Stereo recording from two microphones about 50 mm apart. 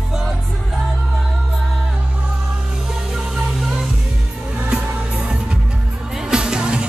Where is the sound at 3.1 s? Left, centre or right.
Centre.